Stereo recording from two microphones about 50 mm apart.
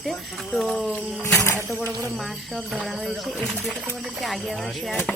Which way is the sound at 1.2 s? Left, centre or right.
Left.